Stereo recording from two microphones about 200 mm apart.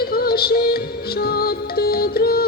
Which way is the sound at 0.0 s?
50° left (ahead or behind).